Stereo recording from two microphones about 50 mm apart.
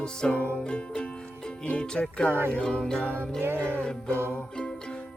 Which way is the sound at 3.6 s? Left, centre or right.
Centre.